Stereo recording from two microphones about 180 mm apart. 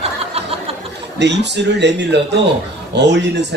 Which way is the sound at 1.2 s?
75° right (ahead or behind).